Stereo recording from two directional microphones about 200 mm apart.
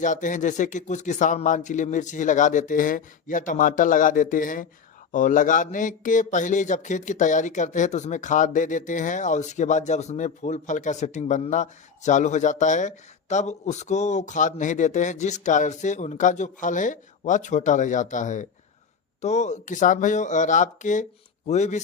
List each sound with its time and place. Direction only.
0.0 s speech: 40° left (ahead or behind)